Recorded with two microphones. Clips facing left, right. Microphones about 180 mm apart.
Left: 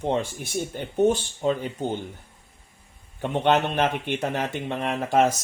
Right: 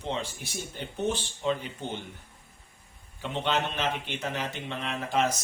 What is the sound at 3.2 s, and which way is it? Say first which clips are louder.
Speech: left 7 dB; 55° left (ahead or behind).